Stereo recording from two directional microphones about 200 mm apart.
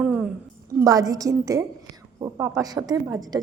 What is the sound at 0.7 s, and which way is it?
A woman's voice, 20° right (ahead or behind).